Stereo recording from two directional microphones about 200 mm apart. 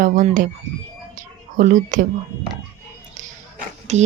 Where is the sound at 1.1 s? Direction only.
40° right (ahead or behind).